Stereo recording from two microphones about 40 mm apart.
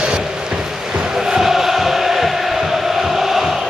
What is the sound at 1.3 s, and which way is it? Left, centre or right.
Chant, centre.